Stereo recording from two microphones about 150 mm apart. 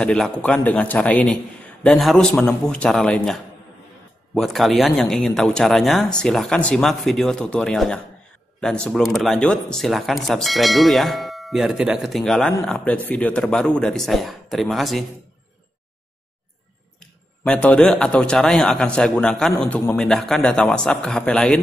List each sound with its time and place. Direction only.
0.0 s speech: 5° left (ahead or behind)
4.4 s speech: centre (ahead or behind)
17.5 s a man's voice: 10° left (ahead or behind)